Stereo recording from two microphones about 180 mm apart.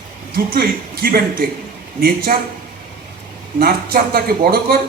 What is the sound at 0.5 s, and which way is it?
Speech, 55° right (ahead or behind).